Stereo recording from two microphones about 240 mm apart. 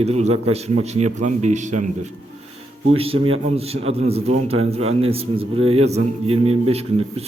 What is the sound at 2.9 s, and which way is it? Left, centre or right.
A man's voice, right.